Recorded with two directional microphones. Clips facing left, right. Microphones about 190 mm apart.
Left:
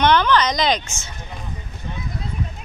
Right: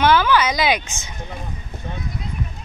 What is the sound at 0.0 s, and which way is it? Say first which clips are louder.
A woman's voice: even; 5° right (ahead or behind).